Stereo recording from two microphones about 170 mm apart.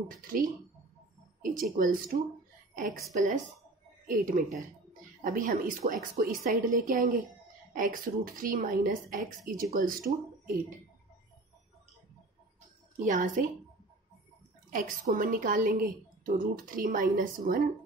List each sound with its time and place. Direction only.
0.2 s a woman's voice: 55° right (ahead or behind)
4.1 s a woman's voice: 55° right (ahead or behind)
13.0 s a woman's voice: 50° right (ahead or behind)
14.7 s a woman's voice: 55° right (ahead or behind)